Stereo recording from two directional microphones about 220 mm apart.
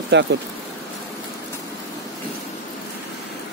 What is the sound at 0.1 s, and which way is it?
Speech, 55° right (ahead or behind).